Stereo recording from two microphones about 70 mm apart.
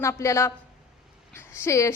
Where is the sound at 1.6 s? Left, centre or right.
Left.